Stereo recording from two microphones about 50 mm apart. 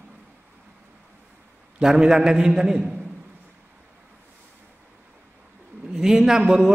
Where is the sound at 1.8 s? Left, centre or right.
Centre.